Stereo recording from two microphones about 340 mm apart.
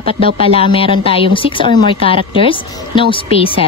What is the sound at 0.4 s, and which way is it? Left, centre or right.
Speech, centre.